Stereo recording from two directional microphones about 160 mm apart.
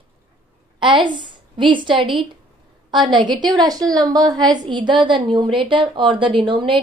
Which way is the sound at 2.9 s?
30° right (ahead or behind).